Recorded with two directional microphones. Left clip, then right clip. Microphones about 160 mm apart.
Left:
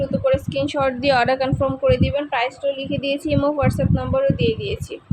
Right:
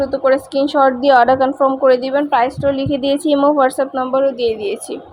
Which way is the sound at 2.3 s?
40° right (ahead or behind).